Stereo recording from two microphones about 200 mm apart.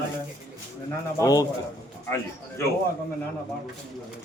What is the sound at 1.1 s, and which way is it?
Speech, 15° left (ahead or behind).